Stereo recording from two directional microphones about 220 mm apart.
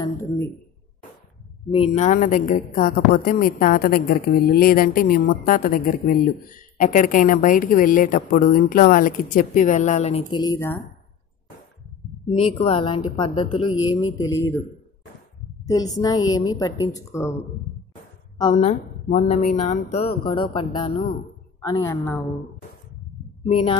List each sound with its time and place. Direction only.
0.0 s speech: 10° left (ahead or behind)
1.7 s a woman's voice: 30° left (ahead or behind)
10.4 s a woman's voice: 10° left (ahead or behind)
12.3 s speech: 30° left (ahead or behind)
14.3 s a woman's voice: 10° left (ahead or behind)
15.6 s a woman's voice: 15° left (ahead or behind)
18.5 s a woman's voice: 30° left (ahead or behind); by 21.9 s 15° left (ahead or behind)
23.5 s speech: 25° left (ahead or behind)